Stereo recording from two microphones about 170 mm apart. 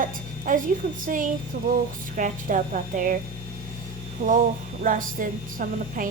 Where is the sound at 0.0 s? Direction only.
50° right (ahead or behind).